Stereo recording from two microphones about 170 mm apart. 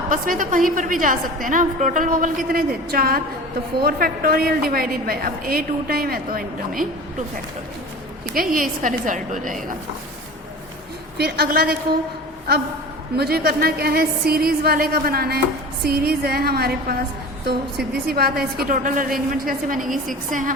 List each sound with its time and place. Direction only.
0.1 s a woman's voice: 50° right (ahead or behind)
8.3 s a woman's voice: 55° right (ahead or behind)
11.2 s a woman's voice: 65° right (ahead or behind)
13.1 s a woman's voice: 65° right (ahead or behind); by 20.5 s 50° right (ahead or behind)